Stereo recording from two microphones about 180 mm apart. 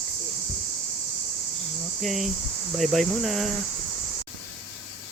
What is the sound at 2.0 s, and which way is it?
Speech, centre (ahead or behind).